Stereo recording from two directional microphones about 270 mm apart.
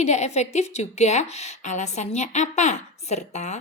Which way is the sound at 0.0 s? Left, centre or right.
Left.